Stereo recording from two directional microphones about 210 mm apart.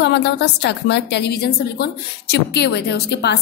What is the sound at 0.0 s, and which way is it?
A woman's voice, 55° left (ahead or behind).